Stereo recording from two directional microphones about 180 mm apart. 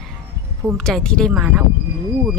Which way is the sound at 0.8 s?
5° left (ahead or behind).